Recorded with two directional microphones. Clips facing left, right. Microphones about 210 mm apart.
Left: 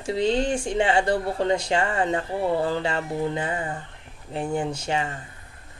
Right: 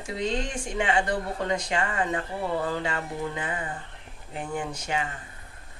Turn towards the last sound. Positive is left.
turn(degrees=30)  # may be behind; listen again after turning